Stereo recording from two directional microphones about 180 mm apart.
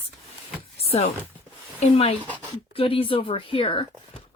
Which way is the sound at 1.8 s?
35° left (ahead or behind).